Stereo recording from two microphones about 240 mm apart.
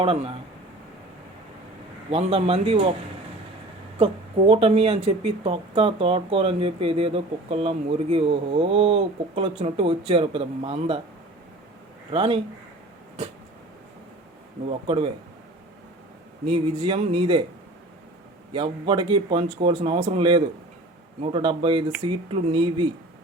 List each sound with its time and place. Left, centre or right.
0.0 s speech: right
2.0 s speech: right
3.9 s speech: right
12.1 s speech: right
14.7 s speech: right
16.5 s speech: right
18.5 s speech: right